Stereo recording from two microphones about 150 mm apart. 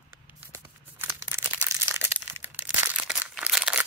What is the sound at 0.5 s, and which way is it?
Crumpling, 20° right (ahead or behind).